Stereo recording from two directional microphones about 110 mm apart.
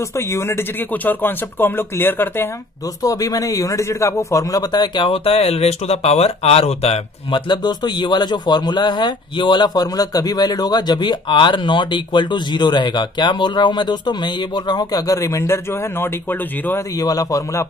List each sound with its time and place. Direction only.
0.1 s speech: 25° left (ahead or behind)
3.0 s speech: 35° left (ahead or behind); by 7.0 s 70° left (ahead or behind)
7.2 s speech: 45° left (ahead or behind); by 16.8 s 20° left (ahead or behind)
16.9 s a man's voice: 35° left (ahead or behind)